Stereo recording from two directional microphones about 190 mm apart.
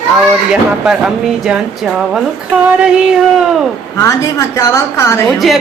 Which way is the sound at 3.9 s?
15° left (ahead or behind).